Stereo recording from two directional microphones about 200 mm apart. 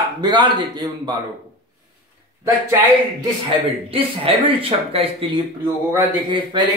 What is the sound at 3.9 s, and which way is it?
Speech, 30° right (ahead or behind).